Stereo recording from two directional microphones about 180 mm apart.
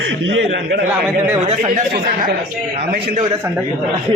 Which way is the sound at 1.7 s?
55° right (ahead or behind).